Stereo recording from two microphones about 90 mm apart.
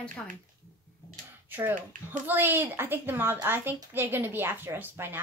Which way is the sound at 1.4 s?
20° right (ahead or behind).